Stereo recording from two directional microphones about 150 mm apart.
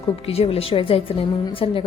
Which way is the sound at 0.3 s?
40° left (ahead or behind).